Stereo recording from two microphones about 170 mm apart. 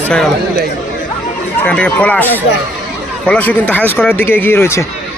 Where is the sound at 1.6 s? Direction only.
5° left (ahead or behind).